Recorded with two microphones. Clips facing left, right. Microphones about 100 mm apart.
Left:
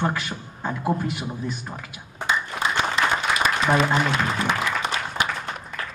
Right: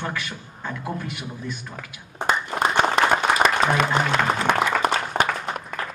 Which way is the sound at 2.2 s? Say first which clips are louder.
Right 3 dB; 50° right (ahead or behind).